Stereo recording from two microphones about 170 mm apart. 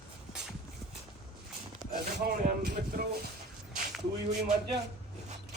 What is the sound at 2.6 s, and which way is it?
Speech, 70° right (ahead or behind).